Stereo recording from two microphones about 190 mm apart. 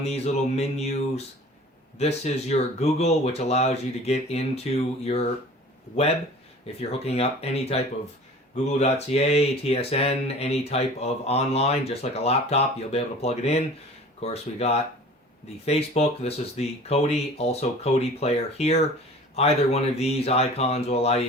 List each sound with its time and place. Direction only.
0.0 s speech: 35° left (ahead or behind)
6.7 s speech: 35° left (ahead or behind)